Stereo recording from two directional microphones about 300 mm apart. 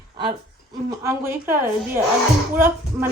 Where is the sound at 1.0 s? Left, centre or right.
Centre.